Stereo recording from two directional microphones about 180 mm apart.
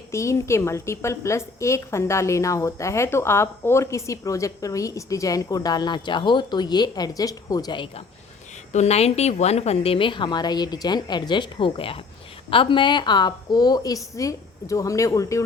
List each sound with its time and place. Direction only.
0.1 s a woman's voice: 15° left (ahead or behind)
8.7 s a woman's voice: 35° left (ahead or behind); by 15.4 s 15° left (ahead or behind)